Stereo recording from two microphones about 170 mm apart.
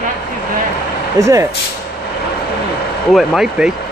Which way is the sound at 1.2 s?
15° right (ahead or behind).